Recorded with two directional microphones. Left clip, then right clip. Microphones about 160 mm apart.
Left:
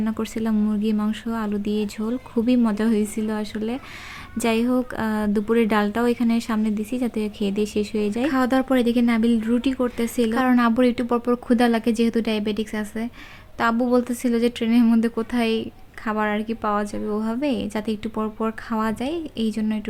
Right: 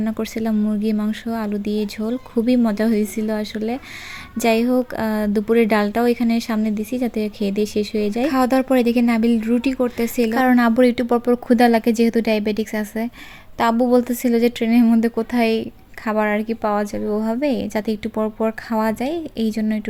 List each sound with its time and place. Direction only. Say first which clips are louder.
0.0 s a woman's voice: right 3 dB; 15° right (ahead or behind)